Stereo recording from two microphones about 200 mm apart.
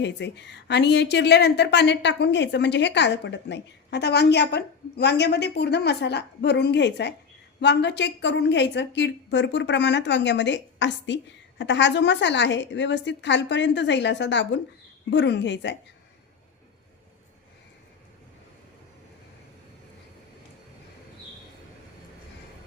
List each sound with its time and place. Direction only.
0.0 s a woman's voice: 60° left (ahead or behind)